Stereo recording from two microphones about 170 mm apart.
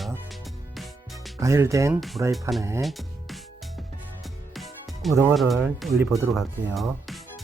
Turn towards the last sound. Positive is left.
turn(degrees=0)  # may be behind; listen again after turning